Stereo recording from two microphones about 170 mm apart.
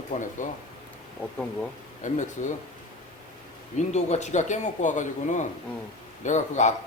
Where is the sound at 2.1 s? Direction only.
45° left (ahead or behind).